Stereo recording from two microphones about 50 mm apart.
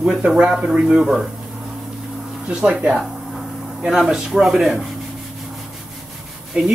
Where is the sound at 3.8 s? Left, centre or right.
Centre.